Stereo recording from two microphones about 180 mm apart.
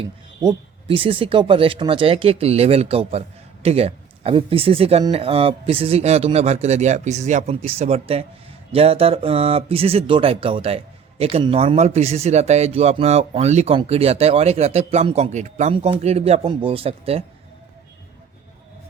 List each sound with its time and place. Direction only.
0.0 s speech: 30° right (ahead or behind)